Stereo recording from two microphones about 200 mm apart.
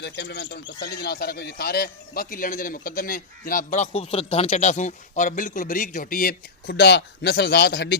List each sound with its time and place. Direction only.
0.0 s speech: 60° left (ahead or behind)